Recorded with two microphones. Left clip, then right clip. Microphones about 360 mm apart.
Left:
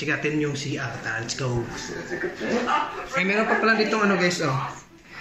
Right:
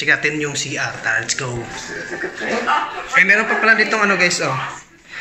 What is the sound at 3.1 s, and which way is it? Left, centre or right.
A man's voice, centre.